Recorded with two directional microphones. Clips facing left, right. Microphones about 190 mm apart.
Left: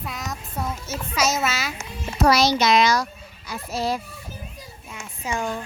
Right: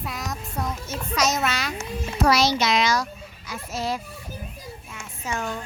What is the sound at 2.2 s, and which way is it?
A child's voice, 40° left (ahead or behind).